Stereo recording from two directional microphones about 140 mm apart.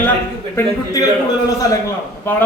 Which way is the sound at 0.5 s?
25° left (ahead or behind).